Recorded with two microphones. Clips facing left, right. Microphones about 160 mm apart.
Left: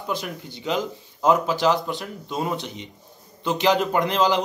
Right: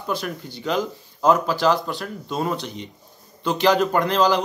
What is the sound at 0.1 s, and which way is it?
A man's voice, 20° left (ahead or behind).